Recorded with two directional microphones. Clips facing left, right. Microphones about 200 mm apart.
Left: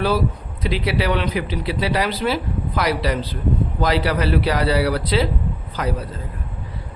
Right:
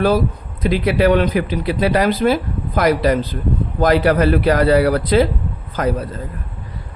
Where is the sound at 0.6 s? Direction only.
50° right (ahead or behind).